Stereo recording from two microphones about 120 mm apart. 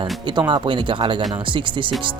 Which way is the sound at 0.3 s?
40° right (ahead or behind).